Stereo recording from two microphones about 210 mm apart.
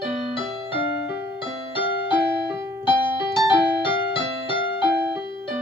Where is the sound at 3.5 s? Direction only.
25° left (ahead or behind).